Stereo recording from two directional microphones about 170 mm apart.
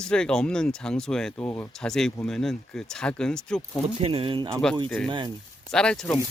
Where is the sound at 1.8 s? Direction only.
5° left (ahead or behind).